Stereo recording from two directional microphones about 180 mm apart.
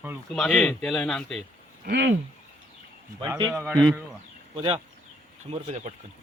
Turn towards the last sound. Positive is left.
turn(degrees=-35)  # may be behind; listen again after turning